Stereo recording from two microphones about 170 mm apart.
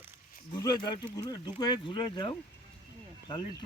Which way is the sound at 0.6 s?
25° left (ahead or behind).